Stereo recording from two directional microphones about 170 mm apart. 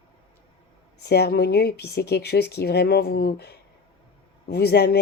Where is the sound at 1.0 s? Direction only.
70° left (ahead or behind).